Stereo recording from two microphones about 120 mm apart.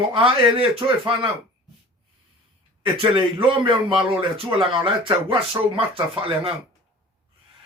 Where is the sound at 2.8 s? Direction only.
45° right (ahead or behind).